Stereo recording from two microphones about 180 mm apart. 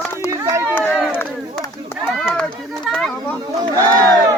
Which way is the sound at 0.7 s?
5° left (ahead or behind).